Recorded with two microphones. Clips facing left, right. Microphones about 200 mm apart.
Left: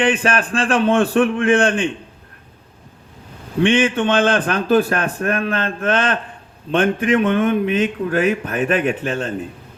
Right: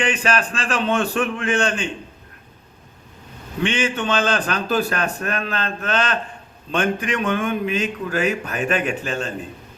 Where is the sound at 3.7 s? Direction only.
55° left (ahead or behind).